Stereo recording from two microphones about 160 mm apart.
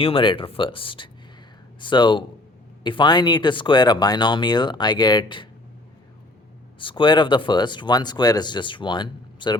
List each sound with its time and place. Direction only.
0.0 s speech: 35° left (ahead or behind)
6.7 s speech: 30° left (ahead or behind)